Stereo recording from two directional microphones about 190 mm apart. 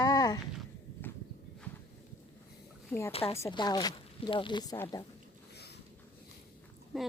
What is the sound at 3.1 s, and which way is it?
Speech, 30° left (ahead or behind).